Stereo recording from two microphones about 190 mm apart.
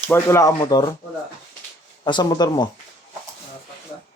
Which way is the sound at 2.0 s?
25° left (ahead or behind).